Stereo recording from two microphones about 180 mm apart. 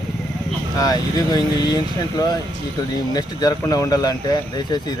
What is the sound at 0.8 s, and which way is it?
Speech, 20° left (ahead or behind).